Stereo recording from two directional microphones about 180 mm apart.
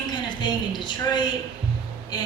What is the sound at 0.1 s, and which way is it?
A woman's voice, 25° left (ahead or behind).